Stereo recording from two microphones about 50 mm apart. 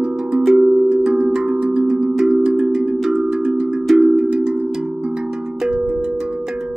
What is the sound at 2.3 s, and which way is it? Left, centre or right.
Cowbell, centre.